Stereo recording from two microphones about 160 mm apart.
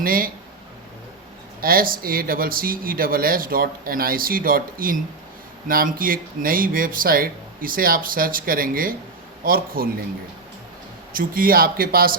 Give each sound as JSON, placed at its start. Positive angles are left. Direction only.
{"t": 0.0, "sound": "speech", "side_deg": -65}
{"t": 1.6, "sound": "speech", "side_deg": -65}
{"t": 11.1, "sound": "speech", "side_deg": -60}